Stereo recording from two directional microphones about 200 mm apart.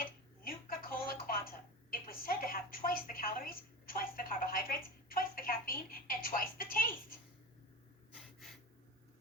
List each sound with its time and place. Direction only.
0.4 s telephone: 45° left (ahead or behind)
8.1 s gasp: centre (ahead or behind)